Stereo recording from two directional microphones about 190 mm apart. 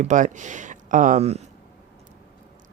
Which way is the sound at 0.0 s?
40° right (ahead or behind).